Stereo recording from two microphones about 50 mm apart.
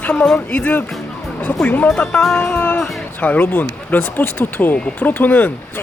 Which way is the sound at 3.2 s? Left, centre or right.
Left.